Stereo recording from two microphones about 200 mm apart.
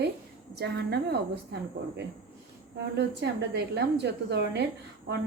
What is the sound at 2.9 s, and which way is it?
Speech, 55° right (ahead or behind).